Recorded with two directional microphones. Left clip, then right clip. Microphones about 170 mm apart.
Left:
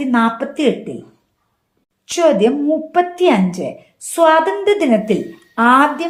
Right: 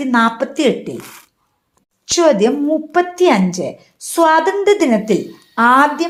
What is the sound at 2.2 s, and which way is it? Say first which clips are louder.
A woman's voice: even; 35° right (ahead or behind).